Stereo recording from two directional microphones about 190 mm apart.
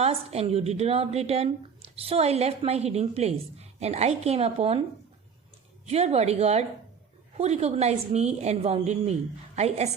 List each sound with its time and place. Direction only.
0.0 s a woman's voice: 35° right (ahead or behind)
5.8 s a woman's voice: 35° right (ahead or behind)